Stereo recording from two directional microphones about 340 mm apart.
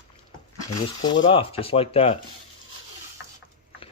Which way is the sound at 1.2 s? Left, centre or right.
Centre.